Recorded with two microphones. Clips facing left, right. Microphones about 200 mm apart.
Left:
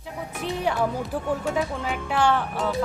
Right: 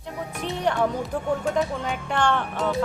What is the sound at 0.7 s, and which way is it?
Speech, 5° left (ahead or behind).